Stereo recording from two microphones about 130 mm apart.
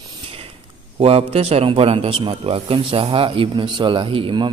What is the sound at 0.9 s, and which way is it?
A man's voice, 50° right (ahead or behind).